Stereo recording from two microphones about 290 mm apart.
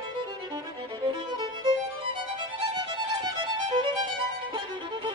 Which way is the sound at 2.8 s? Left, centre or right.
Centre.